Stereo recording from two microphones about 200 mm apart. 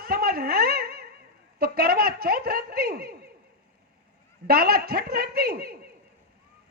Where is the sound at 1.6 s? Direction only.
50° right (ahead or behind).